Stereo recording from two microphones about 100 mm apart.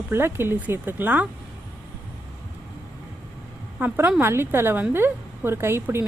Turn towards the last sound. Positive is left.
turn(degrees=-25)  # may be behind; listen again after turning